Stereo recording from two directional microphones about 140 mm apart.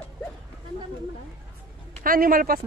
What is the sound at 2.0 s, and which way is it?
Speech, 90° right.